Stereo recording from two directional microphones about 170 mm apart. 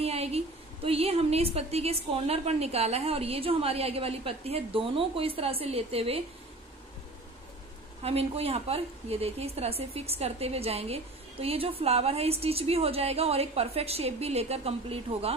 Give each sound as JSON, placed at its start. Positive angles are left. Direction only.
{"t": 0.0, "sound": "a sound", "side_deg": -35}
{"t": 0.8, "sound": "a woman's voice", "side_deg": -35}
{"t": 8.0, "sound": "a woman's voice", "side_deg": -35}